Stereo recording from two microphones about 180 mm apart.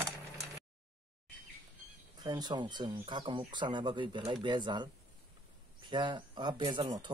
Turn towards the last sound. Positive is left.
turn(degrees=-25)  # may be behind; listen again after turning